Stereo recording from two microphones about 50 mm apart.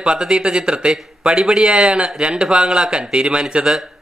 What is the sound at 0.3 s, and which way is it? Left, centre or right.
Speech, centre.